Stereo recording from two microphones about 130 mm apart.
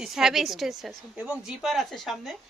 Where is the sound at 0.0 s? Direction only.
5° right (ahead or behind).